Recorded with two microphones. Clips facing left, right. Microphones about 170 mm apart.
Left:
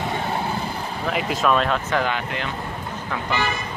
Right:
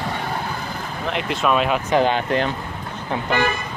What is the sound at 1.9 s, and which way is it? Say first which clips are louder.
Speech: right 5 dB; 25° right (ahead or behind).